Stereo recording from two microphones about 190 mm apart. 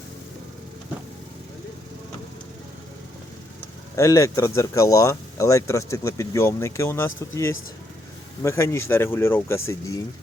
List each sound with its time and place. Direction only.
3.9 s speech: 15° left (ahead or behind)
8.4 s speech: 15° left (ahead or behind)